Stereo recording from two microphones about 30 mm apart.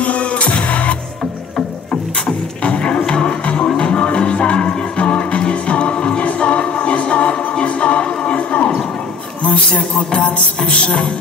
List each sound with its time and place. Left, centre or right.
0.0 s music: left
2.6 s music: left
3.1 s music: left
5.1 s music: left
5.5 s music: left
9.4 s a sound: left